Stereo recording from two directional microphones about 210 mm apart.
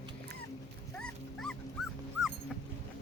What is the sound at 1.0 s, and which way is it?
Music, 5° left (ahead or behind).